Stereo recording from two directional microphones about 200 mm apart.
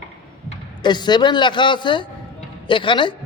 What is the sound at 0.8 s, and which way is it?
A woman's voice, 20° left (ahead or behind).